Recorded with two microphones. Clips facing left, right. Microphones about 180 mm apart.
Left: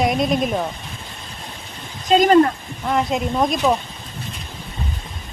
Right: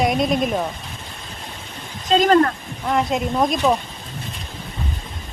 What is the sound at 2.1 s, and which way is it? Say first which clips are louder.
Speech: left 2 dB; 15° left (ahead or behind).